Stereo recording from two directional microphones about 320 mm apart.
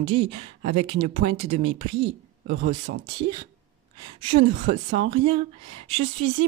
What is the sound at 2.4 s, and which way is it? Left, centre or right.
Speech, right.